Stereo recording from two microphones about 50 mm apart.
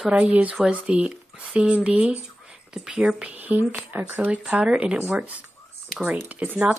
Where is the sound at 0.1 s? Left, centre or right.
Right.